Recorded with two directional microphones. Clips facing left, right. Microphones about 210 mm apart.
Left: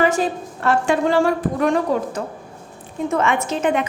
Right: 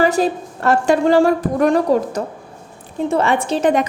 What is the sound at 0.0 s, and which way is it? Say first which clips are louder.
A woman's voice: right 3 dB; 35° right (ahead or behind).